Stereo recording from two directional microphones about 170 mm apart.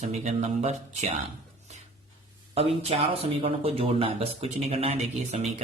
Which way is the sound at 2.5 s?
35° right (ahead or behind).